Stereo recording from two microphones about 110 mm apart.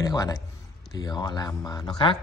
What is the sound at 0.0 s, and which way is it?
A man's voice, 35° left (ahead or behind).